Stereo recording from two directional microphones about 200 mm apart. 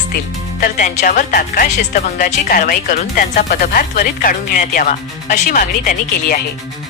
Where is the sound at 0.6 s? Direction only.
40° left (ahead or behind).